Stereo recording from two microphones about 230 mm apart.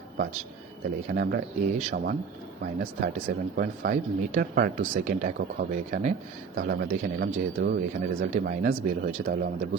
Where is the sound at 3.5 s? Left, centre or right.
Right.